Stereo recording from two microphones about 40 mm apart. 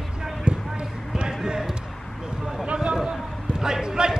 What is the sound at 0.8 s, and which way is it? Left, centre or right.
Basketball bounce, right.